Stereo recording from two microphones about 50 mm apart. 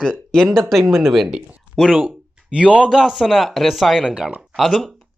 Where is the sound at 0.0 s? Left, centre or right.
Centre.